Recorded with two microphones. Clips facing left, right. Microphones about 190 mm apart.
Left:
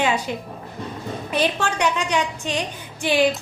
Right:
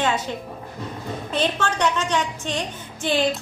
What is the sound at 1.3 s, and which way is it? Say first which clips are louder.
A woman's voice: left 1 dB; 10° left (ahead or behind).